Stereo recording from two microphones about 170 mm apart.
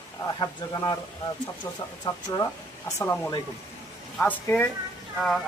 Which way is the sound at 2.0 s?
20° left (ahead or behind).